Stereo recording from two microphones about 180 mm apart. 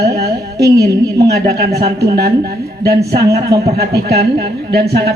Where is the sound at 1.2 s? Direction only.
65° right (ahead or behind).